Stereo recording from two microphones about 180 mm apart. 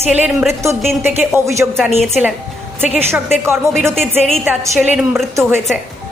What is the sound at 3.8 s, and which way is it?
A woman's voice, centre (ahead or behind).